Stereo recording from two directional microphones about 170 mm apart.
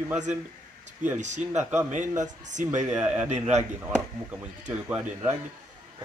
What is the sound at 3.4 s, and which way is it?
Speech, 40° right (ahead or behind).